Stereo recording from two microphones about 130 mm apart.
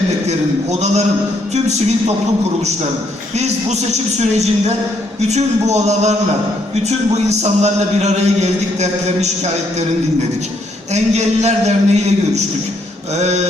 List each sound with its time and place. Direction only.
0.3 s speech: 60° right (ahead or behind)
3.3 s speech: 60° right (ahead or behind)
5.3 s speech: 60° right (ahead or behind)
10.9 s speech: 60° right (ahead or behind)